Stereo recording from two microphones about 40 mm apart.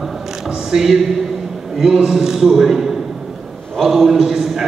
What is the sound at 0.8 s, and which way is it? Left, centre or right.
A man's voice, centre.